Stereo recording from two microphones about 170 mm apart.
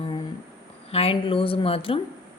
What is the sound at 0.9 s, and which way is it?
Speech, 35° left (ahead or behind).